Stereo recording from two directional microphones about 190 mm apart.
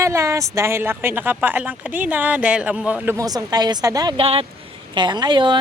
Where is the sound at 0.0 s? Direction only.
15° right (ahead or behind).